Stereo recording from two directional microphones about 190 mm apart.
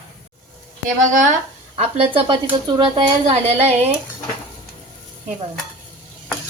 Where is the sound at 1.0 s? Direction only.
40° right (ahead or behind).